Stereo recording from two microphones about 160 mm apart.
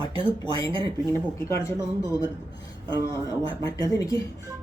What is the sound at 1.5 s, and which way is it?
Speech, 20° left (ahead or behind).